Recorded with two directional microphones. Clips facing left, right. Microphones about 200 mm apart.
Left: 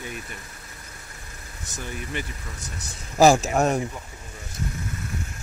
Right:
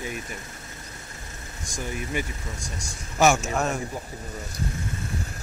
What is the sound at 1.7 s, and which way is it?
Speech, 10° right (ahead or behind).